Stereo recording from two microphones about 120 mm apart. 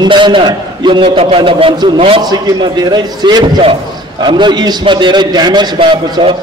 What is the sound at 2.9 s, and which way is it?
A man's voice, 35° right (ahead or behind).